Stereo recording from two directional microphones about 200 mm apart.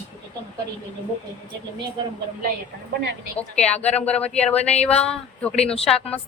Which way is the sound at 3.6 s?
30° left (ahead or behind).